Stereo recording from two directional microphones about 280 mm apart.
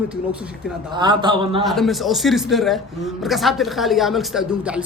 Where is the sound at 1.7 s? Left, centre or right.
Centre.